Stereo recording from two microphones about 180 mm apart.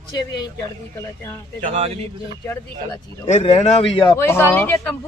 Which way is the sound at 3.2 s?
35° left (ahead or behind).